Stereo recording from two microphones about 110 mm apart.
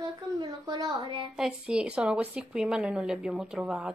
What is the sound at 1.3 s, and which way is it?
Speech, 5° right (ahead or behind).